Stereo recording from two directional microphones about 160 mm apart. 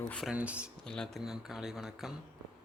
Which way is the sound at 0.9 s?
5° left (ahead or behind).